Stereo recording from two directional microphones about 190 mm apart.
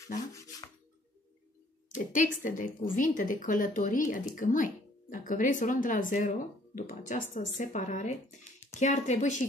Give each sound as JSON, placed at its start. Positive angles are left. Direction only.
{"t": 0.3, "sound": "rub", "side_deg": 15}
{"t": 1.9, "sound": "speech", "side_deg": 45}